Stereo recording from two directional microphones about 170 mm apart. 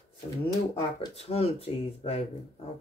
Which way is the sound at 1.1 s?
35° left (ahead or behind).